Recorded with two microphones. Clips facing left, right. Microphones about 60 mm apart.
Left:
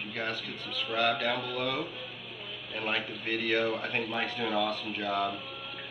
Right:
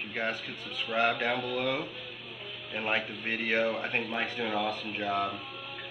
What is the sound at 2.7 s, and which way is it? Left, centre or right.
Speech, right.